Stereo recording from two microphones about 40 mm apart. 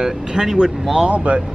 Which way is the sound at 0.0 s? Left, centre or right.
Centre.